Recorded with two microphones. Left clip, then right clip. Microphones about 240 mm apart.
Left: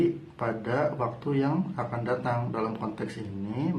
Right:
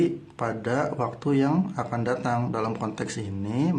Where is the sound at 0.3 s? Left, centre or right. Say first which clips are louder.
Right 2 dB; right.